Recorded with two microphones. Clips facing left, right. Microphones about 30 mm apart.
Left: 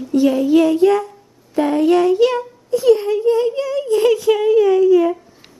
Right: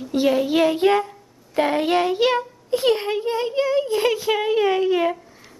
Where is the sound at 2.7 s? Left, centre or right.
Right.